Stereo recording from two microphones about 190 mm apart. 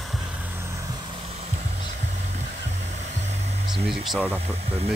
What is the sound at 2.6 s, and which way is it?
Music, 35° right (ahead or behind).